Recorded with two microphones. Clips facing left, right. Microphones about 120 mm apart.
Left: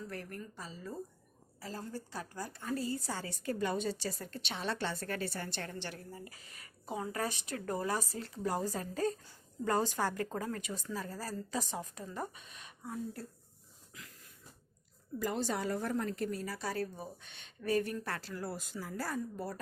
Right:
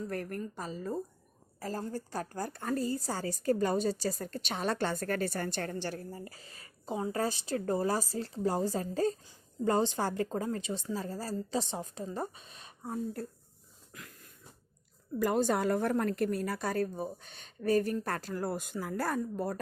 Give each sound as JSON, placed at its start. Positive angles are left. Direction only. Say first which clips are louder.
{"t": 0.0, "sound": "a woman's voice", "louder": "right 7 dB", "side_deg": -50}
{"t": 13.9, "sound": "a sound", "louder": "right 4 dB", "side_deg": -55}
{"t": 15.2, "sound": "a woman's voice", "louder": "right 7 dB", "side_deg": -55}